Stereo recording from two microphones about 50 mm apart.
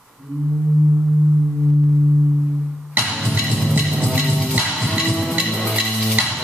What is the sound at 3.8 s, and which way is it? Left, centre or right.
Music, centre.